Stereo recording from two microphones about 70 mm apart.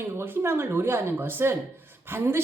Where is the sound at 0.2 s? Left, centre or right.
Right.